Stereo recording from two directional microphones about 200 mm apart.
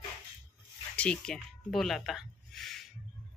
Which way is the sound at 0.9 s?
5° left (ahead or behind).